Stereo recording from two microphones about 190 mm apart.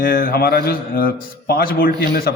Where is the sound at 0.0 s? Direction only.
50° left (ahead or behind).